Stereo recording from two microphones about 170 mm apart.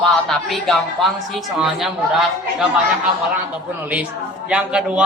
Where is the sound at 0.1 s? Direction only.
Centre (ahead or behind).